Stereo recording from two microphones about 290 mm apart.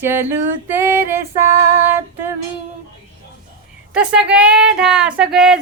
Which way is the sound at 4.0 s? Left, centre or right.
Centre.